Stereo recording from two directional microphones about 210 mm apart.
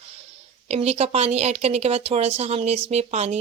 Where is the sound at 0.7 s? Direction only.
30° right (ahead or behind).